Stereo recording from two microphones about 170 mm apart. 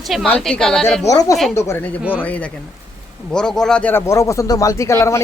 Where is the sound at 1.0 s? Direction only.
20° left (ahead or behind).